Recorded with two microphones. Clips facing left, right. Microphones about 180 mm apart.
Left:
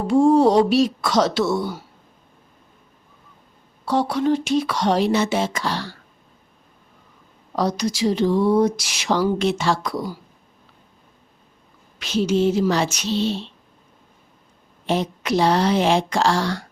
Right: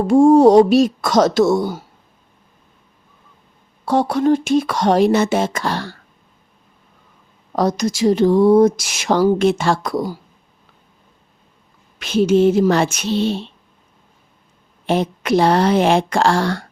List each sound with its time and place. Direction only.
0.0 s speech: 45° right (ahead or behind)
3.8 s speech: 50° right (ahead or behind)
7.5 s speech: 50° right (ahead or behind)
11.9 s speech: 55° right (ahead or behind)
14.8 s a woman's voice: 55° right (ahead or behind)